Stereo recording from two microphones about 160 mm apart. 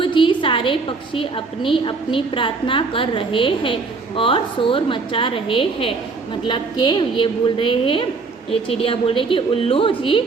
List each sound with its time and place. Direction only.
0.0 s a woman's voice: 30° left (ahead or behind)